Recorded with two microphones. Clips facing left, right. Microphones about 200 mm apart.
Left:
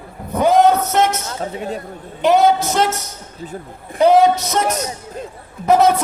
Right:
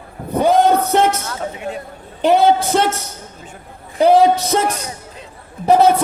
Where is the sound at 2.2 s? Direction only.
30° right (ahead or behind).